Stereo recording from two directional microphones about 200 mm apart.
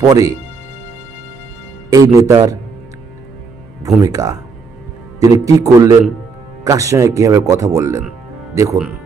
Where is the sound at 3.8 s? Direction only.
20° right (ahead or behind).